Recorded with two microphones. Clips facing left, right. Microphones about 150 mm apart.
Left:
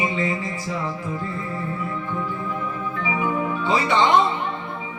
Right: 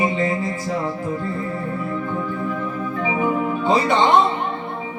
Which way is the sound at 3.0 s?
40° right (ahead or behind).